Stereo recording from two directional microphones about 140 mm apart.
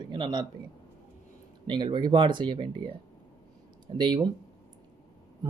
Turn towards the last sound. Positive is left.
turn(degrees=-35)  # may be behind; listen again after turning